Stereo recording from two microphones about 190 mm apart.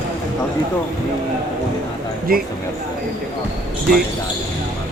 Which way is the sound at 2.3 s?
50° right (ahead or behind).